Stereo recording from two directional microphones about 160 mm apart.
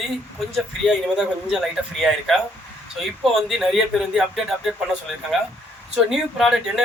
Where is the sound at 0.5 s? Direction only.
5° right (ahead or behind).